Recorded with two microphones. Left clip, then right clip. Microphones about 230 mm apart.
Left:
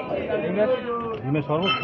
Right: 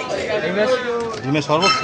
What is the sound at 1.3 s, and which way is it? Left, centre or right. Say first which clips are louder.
Speech: right 7 dB; right.